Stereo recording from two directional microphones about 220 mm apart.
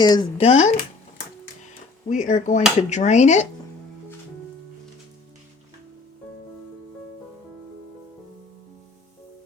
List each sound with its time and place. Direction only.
0.0 s speech: 20° left (ahead or behind)
2.0 s speech: 35° left (ahead or behind)